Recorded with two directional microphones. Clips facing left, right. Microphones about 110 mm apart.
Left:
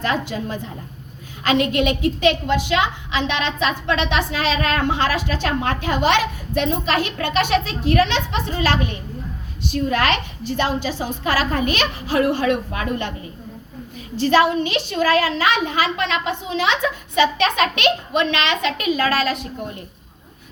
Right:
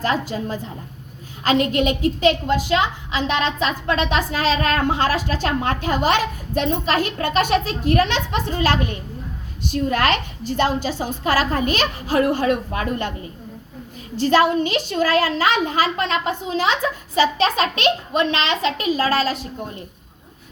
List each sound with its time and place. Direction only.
0.0 s a woman's voice: 40° right (ahead or behind)
14.2 s a woman's voice: 45° right (ahead or behind)